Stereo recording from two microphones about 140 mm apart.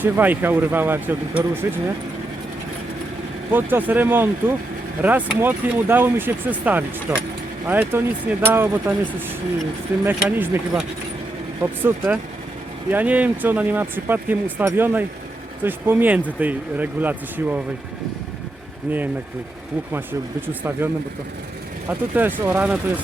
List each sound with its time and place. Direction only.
0.0 s speech: 15° right (ahead or behind)
3.5 s speech: 15° right (ahead or behind)
20.5 s speech: 15° right (ahead or behind)